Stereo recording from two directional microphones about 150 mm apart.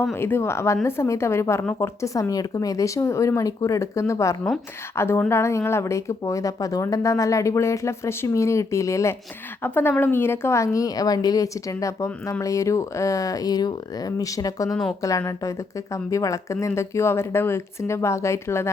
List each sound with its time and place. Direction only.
0.0 s speech: 15° left (ahead or behind)
14.7 s speech: centre (ahead or behind)
15.3 s speech: 20° left (ahead or behind)